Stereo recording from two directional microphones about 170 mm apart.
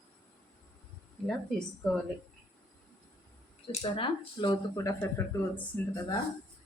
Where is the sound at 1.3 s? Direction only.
5° left (ahead or behind).